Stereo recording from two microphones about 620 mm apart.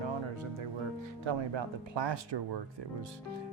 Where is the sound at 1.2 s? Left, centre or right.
Right.